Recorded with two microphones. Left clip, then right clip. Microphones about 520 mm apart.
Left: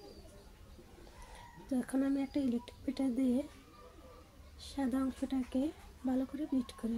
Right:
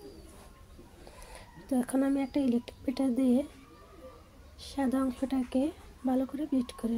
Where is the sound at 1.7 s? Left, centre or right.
Left.